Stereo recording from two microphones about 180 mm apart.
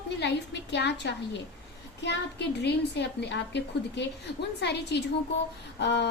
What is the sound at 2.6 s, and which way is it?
A woman's voice, 70° left (ahead or behind).